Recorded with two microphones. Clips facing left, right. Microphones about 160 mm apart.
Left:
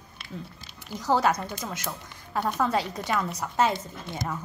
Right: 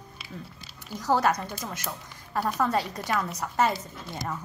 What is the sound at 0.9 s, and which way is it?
A child's voice, centre (ahead or behind).